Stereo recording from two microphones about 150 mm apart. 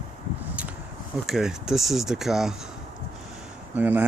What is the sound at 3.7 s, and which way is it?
Speech, 10° right (ahead or behind).